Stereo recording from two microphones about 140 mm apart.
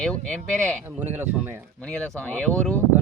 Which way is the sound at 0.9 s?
15° right (ahead or behind).